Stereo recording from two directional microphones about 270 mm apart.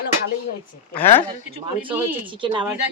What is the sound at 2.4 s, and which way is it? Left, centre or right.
Speech, centre.